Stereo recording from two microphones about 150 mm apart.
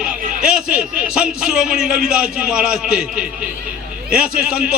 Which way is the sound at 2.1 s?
5° right (ahead or behind).